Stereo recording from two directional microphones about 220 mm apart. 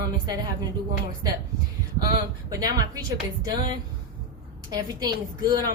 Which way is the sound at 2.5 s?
15° right (ahead or behind).